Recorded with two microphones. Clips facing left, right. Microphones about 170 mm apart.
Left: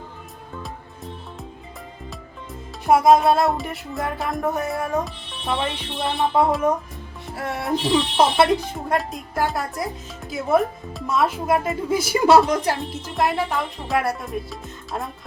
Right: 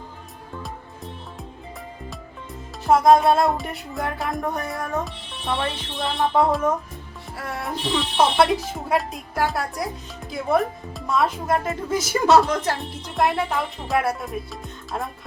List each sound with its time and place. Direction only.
2.8 s speech: 10° left (ahead or behind)
7.3 s speech: 25° left (ahead or behind)
8.1 s speech: 10° left (ahead or behind)
8.4 s speech: centre (ahead or behind)